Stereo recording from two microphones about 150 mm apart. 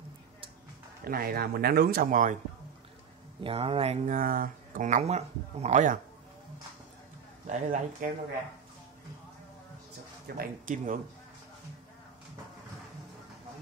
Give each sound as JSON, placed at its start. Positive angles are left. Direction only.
{"t": 1.0, "sound": "speech", "side_deg": -85}
{"t": 3.4, "sound": "speech", "side_deg": -40}
{"t": 7.4, "sound": "speech", "side_deg": -50}
{"t": 10.2, "sound": "speech", "side_deg": -80}